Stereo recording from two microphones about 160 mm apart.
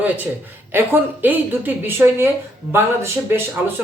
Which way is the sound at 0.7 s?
15° right (ahead or behind).